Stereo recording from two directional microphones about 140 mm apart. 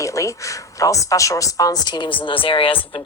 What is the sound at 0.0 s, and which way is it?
Speech, 20° left (ahead or behind).